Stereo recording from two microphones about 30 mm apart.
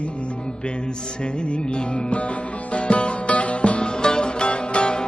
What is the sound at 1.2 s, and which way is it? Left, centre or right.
Music, left.